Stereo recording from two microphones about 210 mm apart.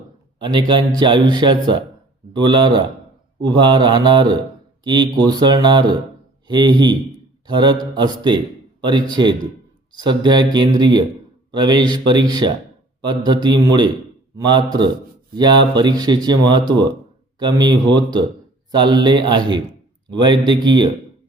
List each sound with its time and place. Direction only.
0.4 s speech: 20° right (ahead or behind)